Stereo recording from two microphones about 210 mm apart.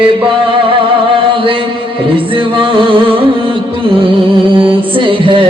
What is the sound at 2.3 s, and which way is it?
Music, 25° right (ahead or behind).